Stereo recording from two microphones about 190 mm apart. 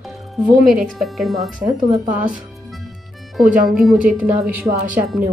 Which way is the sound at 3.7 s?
Centre (ahead or behind).